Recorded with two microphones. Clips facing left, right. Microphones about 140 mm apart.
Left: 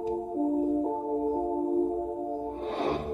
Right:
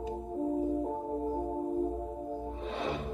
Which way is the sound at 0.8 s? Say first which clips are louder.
Left 5 dB; 25° left (ahead or behind).